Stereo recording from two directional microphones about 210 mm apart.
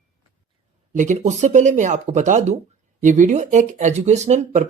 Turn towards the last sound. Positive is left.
turn(degrees=-35)  # may be behind; listen again after turning